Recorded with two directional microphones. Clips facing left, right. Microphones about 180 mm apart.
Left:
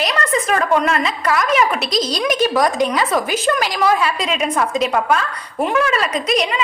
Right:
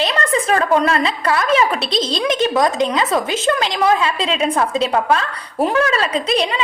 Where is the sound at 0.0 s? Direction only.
30° right (ahead or behind).